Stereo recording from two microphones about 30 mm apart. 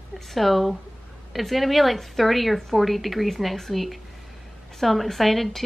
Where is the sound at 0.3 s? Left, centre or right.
Centre.